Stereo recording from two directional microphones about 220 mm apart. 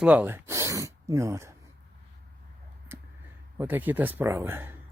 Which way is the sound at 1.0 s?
15° right (ahead or behind).